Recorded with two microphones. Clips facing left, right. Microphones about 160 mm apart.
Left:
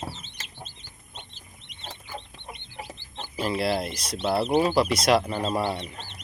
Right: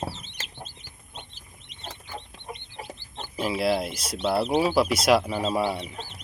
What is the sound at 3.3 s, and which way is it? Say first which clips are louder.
Speech: right 1 dB; 5° right (ahead or behind).